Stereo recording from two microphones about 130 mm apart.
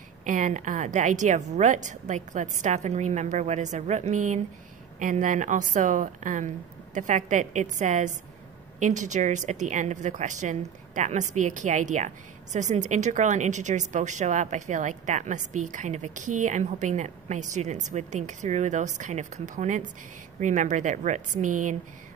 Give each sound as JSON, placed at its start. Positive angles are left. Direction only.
{"t": 0.2, "sound": "a woman's voice", "side_deg": -75}